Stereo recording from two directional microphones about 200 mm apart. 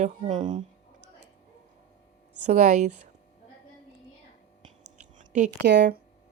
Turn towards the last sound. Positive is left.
turn(degrees=-60)  # may be behind; listen again after turning